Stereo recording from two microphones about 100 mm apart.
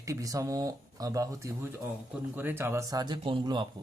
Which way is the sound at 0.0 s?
35° right (ahead or behind).